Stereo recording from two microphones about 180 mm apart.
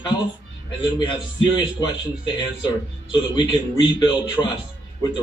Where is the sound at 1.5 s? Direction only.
25° left (ahead or behind).